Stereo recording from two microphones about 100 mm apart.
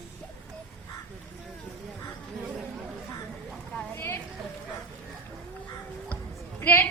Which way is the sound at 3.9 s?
25° left (ahead or behind).